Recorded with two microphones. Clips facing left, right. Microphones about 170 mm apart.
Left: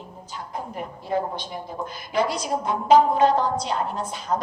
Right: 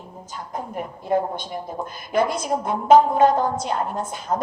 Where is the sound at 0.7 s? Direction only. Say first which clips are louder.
Right 4 dB; 50° right (ahead or behind).